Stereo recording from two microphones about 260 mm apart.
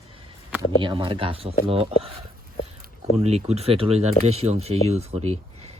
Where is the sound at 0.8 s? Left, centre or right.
Centre.